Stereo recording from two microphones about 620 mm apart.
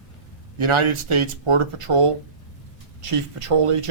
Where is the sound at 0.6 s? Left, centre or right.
Right.